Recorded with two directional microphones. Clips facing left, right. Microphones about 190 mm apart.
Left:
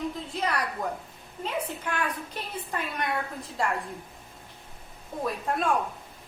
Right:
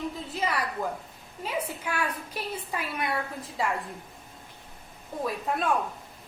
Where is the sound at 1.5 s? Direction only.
10° right (ahead or behind).